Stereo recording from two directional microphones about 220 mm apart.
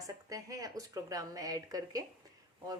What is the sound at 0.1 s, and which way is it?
A woman's voice, 15° right (ahead or behind).